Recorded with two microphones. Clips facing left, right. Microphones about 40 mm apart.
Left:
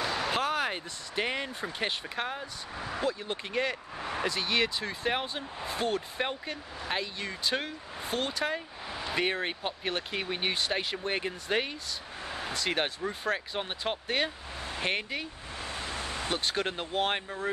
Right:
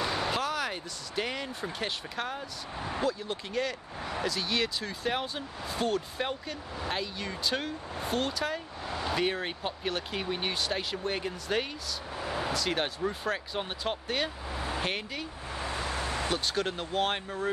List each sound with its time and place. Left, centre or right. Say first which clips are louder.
0.0 s a sound: even; centre
0.3 s speech: left 2 dB; left
12.2 s vehicle: right 5 dB; centre
12.5 s speech: even; centre
15.5 s a sound: right 3 dB; right
16.3 s speech: left 2 dB; centre
17.0 s speech: even; centre